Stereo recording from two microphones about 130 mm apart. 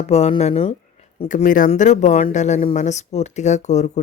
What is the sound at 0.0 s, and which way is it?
Speech, 55° left (ahead or behind).